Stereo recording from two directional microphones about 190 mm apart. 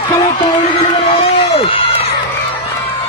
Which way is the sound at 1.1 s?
30° left (ahead or behind).